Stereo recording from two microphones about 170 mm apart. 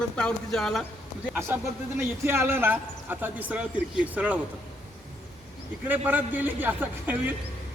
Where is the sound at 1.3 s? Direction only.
15° right (ahead or behind).